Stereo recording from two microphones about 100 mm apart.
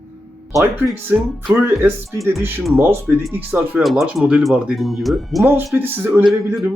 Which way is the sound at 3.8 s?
Centre (ahead or behind).